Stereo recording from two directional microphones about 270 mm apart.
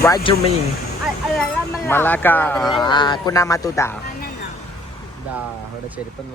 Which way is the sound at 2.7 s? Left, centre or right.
Centre.